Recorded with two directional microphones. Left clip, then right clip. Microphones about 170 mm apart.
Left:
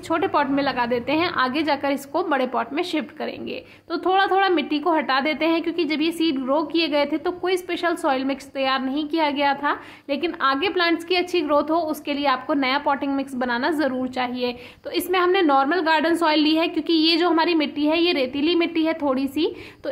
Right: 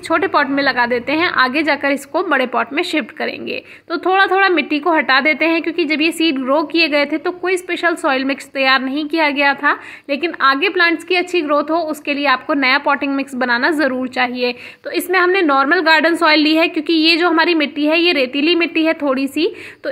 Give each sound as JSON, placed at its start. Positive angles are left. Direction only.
{"t": 0.1, "sound": "a woman's voice", "side_deg": -15}